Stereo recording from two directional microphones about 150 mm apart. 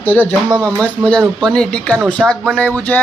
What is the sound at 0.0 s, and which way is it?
Speech, 10° left (ahead or behind).